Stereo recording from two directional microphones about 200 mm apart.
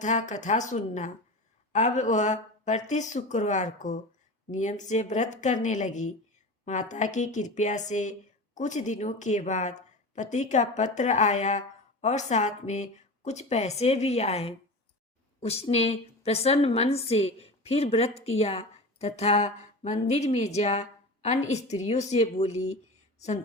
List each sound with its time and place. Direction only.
0.0 s a woman's voice: 35° left (ahead or behind)